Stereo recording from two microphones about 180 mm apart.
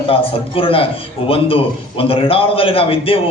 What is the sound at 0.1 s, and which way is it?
A man's voice, 30° left (ahead or behind).